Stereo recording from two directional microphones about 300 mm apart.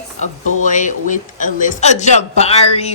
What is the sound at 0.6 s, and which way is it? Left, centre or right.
A man's voice, left.